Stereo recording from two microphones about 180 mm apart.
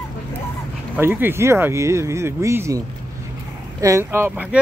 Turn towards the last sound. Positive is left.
turn(degrees=-10)  # may be behind; listen again after turning